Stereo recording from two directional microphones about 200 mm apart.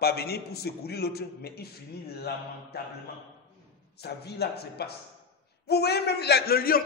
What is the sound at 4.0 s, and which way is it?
A man's voice, 55° left (ahead or behind).